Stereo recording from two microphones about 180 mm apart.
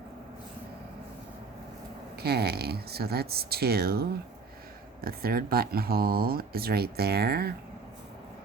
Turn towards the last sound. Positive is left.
turn(degrees=-60)  # may be behind; listen again after turning